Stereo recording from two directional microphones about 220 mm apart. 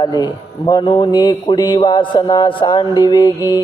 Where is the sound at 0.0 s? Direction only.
20° left (ahead or behind).